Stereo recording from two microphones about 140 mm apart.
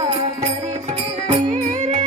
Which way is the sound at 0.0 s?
55° right (ahead or behind).